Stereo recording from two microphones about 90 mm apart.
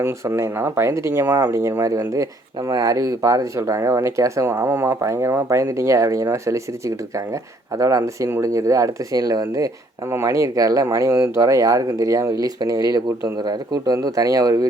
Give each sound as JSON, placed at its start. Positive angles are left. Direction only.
{"t": 0.0, "sound": "speech", "side_deg": -30}
{"t": 10.1, "sound": "speech", "side_deg": -30}